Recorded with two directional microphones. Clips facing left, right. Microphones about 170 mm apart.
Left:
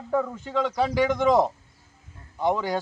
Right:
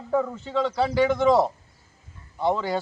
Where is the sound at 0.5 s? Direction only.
15° left (ahead or behind).